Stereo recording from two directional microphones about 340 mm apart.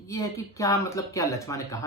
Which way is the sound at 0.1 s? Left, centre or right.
Centre.